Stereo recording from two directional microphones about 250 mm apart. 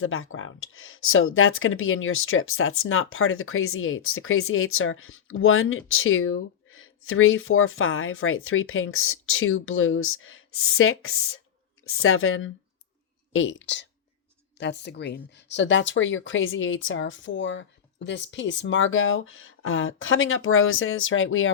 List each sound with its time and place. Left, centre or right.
0.0 s speech: left